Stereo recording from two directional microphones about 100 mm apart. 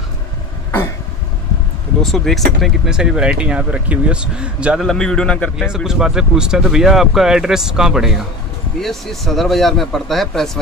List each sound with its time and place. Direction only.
2.0 s speech: centre (ahead or behind)
4.7 s speech: 5° left (ahead or behind)
5.9 s speech: 5° right (ahead or behind)